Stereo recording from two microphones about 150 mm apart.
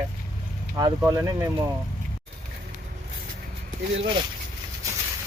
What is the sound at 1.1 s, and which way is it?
Speech, 20° right (ahead or behind).